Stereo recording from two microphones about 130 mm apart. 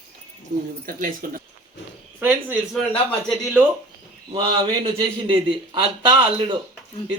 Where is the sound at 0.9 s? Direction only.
90° right.